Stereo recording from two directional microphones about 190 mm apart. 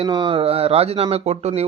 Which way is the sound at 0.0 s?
25° right (ahead or behind).